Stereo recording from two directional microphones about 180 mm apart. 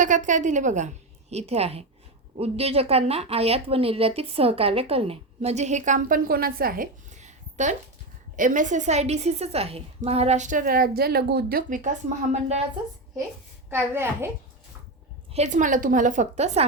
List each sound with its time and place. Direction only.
0.0 s a woman's voice: 45° right (ahead or behind)
13.7 s a woman's voice: 15° right (ahead or behind)
15.3 s a woman's voice: 40° right (ahead or behind)